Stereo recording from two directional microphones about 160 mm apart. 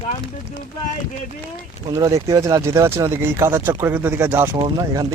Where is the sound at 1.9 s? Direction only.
20° right (ahead or behind).